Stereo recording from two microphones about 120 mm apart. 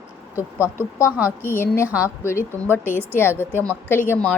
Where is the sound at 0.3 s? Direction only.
25° left (ahead or behind).